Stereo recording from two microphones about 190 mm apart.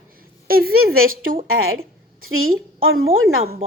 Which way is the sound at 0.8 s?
90° right.